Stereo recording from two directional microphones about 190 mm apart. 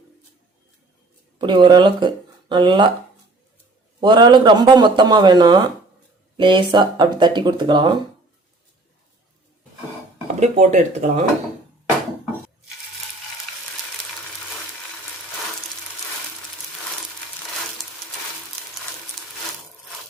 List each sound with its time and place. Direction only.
1.4 s speech: 25° right (ahead or behind)
4.0 s speech: 25° right (ahead or behind)
10.2 s speech: 35° right (ahead or behind)